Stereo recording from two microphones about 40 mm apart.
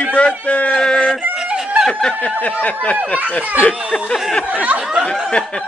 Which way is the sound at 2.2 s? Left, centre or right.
Left.